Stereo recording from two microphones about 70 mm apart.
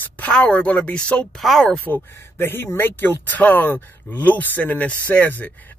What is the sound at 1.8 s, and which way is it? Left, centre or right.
Speech, left.